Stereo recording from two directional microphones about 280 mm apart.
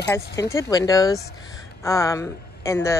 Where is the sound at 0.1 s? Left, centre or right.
Centre.